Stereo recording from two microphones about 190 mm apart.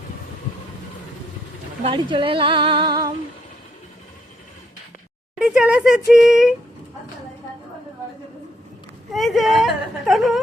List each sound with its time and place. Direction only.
1.8 s speech: 25° right (ahead or behind)
5.4 s speech: 5° right (ahead or behind)
9.1 s speech: centre (ahead or behind)